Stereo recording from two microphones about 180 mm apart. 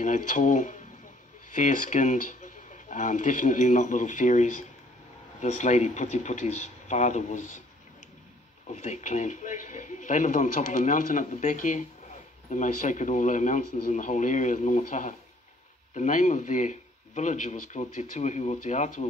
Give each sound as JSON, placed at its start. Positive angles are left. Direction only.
{"t": 0.0, "sound": "speech", "side_deg": 45}
{"t": 8.6, "sound": "speech", "side_deg": 40}